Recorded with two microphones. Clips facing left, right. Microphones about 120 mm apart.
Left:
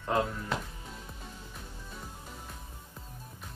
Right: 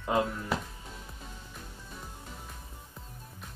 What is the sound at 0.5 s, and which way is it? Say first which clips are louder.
Music: right 2 dB; 5° right (ahead or behind).